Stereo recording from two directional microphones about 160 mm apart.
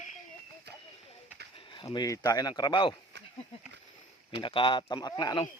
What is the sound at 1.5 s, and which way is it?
Speech, 30° left (ahead or behind).